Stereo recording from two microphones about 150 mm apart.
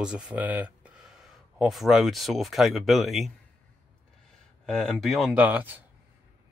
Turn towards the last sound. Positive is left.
turn(degrees=-10)  # may be behind; listen again after turning